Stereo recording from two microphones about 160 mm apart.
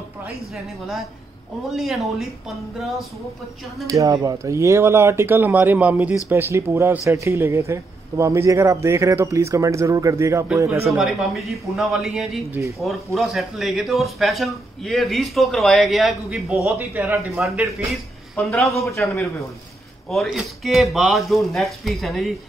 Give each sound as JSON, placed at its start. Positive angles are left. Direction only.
{"t": 1.7, "sound": "speech", "side_deg": 0}
{"t": 3.8, "sound": "a man's voice", "side_deg": -20}
{"t": 11.0, "sound": "speech", "side_deg": 0}
{"t": 16.6, "sound": "speech", "side_deg": -15}
{"t": 17.4, "sound": "speech", "side_deg": 0}
{"t": 20.1, "sound": "speech", "side_deg": 0}